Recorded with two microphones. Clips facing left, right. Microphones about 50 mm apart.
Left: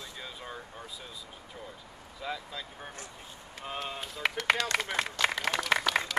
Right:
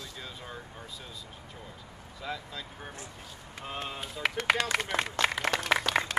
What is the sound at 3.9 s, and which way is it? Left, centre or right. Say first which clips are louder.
A man's voice: even; centre.